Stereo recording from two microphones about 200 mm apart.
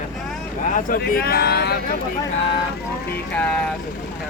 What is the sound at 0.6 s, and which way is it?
Speech, 40° left (ahead or behind).